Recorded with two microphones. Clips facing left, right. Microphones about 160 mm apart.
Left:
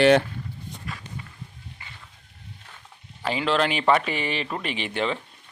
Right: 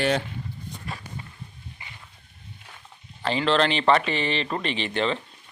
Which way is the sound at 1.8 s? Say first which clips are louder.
Right 1 dB; 15° right (ahead or behind).